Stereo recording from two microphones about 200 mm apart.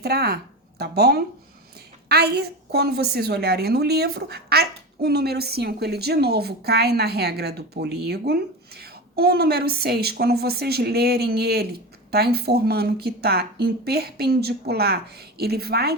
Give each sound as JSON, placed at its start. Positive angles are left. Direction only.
{"t": 0.0, "sound": "a woman's voice", "side_deg": -50}